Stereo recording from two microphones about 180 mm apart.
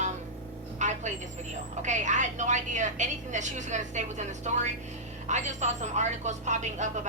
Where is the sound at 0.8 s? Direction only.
40° right (ahead or behind).